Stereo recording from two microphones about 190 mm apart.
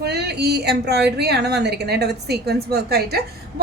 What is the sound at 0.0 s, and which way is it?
A woman's voice, 60° right (ahead or behind).